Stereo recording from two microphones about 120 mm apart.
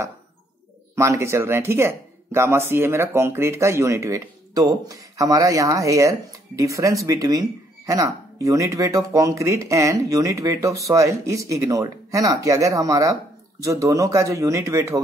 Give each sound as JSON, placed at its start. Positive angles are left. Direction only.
{"t": 0.9, "sound": "speech", "side_deg": -25}